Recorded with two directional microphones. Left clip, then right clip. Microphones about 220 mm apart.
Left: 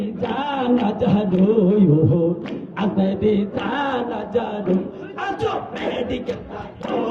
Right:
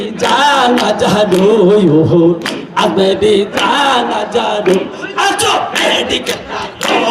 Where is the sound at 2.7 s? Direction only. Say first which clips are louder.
Right 13 dB; 50° right (ahead or behind).